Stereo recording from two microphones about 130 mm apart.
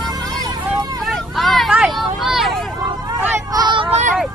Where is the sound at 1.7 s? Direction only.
5° right (ahead or behind).